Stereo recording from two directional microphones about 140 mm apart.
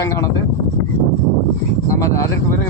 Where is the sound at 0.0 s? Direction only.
20° left (ahead or behind).